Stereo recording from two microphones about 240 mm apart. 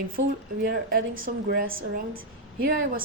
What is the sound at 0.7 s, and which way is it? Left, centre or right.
Speech, right.